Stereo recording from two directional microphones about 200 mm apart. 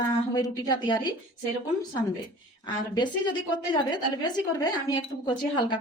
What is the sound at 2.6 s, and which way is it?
A woman's voice, 20° left (ahead or behind).